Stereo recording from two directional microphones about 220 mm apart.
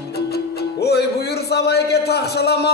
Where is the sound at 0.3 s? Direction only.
45° left (ahead or behind).